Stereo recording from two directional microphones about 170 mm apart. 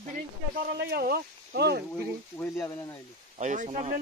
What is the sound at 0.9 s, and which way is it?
Speech, 65° right (ahead or behind).